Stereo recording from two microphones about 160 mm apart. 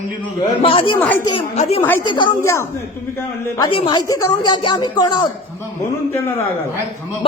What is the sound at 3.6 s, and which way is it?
Speech, 30° left (ahead or behind).